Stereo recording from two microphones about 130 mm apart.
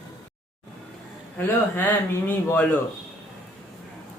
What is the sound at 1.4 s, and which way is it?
Speech, 15° left (ahead or behind).